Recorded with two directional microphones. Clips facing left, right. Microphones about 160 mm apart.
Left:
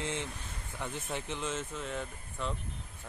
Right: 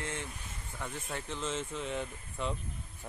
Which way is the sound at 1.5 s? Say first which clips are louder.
Right 1 dB; 5° left (ahead or behind).